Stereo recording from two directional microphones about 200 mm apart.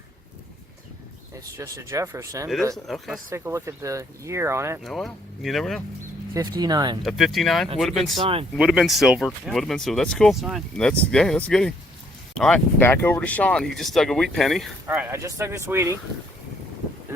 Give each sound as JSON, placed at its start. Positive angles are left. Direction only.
{"t": 1.5, "sound": "speech", "side_deg": -15}
{"t": 2.7, "sound": "speech", "side_deg": 0}
{"t": 3.2, "sound": "speech", "side_deg": -15}
{"t": 4.8, "sound": "speech", "side_deg": 0}
{"t": 6.6, "sound": "speech", "side_deg": -20}
{"t": 7.0, "sound": "speech", "side_deg": 0}
{"t": 8.1, "sound": "speech", "side_deg": -25}
{"t": 8.5, "sound": "speech", "side_deg": 0}
{"t": 14.8, "sound": "speech", "side_deg": -10}